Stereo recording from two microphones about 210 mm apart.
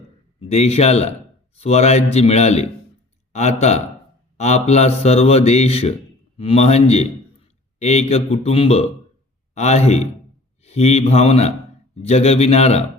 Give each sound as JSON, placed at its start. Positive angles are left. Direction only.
{"t": 0.3, "sound": "a man's voice", "side_deg": 30}